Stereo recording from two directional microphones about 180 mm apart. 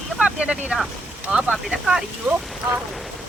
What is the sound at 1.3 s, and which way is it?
Speech, 5° right (ahead or behind).